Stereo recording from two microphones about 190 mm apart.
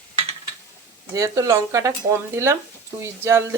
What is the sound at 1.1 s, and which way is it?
Speech, 15° right (ahead or behind).